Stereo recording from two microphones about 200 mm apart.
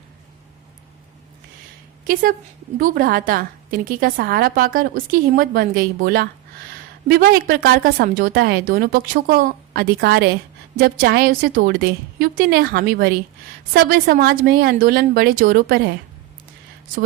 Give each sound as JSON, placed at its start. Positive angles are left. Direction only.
{"t": 2.7, "sound": "a woman's voice", "side_deg": -45}